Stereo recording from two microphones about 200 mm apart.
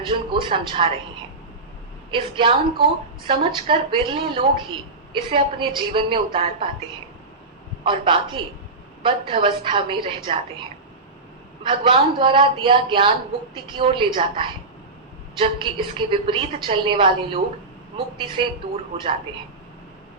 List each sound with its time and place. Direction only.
0.0 s a woman's voice: 25° right (ahead or behind)
2.0 s a woman's voice: 25° right (ahead or behind)
7.9 s a woman's voice: 25° right (ahead or behind)
11.6 s a woman's voice: 25° right (ahead or behind)